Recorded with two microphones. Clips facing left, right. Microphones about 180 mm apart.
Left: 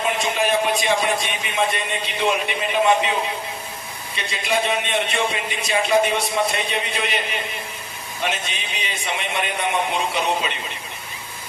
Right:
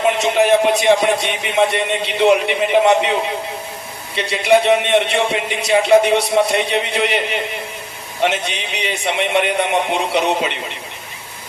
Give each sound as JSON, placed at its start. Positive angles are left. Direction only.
{"t": 0.0, "sound": "speech", "side_deg": -75}